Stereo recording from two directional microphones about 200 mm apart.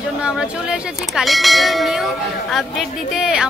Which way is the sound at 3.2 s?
5° right (ahead or behind).